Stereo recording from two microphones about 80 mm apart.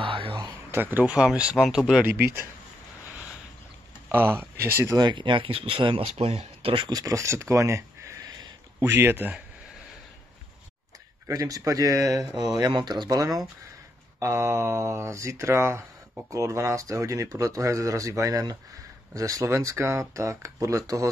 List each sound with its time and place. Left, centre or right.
0.0 s a sound: right
0.7 s speech: right
1.1 s speech: centre
2.0 s speech: right
4.1 s speech: right
4.9 s speech: right
6.9 s speech: right
8.7 s speech: right
11.2 s speech: right
12.5 s speech: right
14.2 s speech: right